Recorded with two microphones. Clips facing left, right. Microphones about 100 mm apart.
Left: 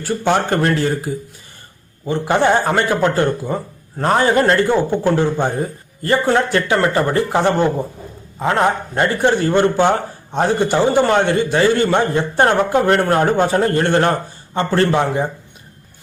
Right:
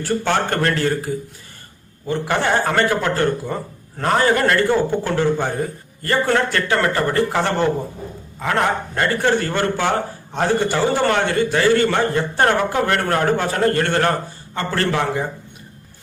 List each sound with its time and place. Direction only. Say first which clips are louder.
0.3 s a man's voice: left 5 dB; 15° left (ahead or behind)